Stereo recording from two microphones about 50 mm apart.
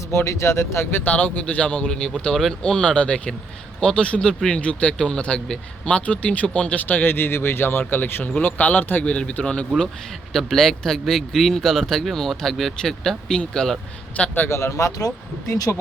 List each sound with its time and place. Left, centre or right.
0.4 s speech: left
1.0 s speech: left
8.4 s speech: left
9.0 s speech: centre
10.3 s speech: centre
14.2 s speech: left
14.5 s speech: left
15.7 s speech: left